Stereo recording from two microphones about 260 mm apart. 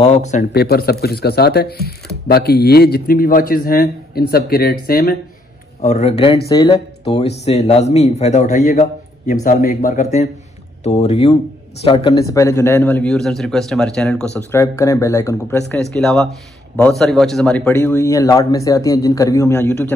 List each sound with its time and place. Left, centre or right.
0.0 s speech: left; by 19.9 s centre